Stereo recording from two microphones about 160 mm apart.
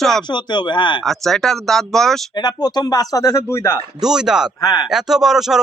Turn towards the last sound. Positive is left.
turn(degrees=0)  # may be behind; listen again after turning